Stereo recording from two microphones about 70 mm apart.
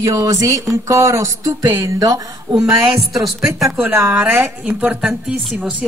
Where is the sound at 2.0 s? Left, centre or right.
Right.